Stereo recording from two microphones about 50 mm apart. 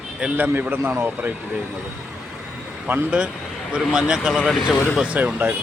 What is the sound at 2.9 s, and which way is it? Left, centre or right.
Speech, right.